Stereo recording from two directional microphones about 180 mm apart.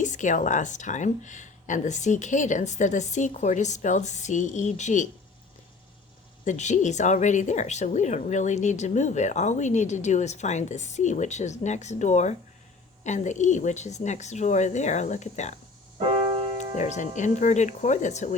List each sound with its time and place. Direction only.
0.0 s speech: 45° left (ahead or behind)
6.4 s a woman's voice: 40° left (ahead or behind)
16.0 s keyboard: 30° right (ahead or behind)
16.7 s a woman's voice: 40° left (ahead or behind)